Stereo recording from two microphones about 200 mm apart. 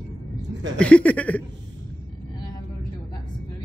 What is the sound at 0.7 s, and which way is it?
Speech, 5° left (ahead or behind).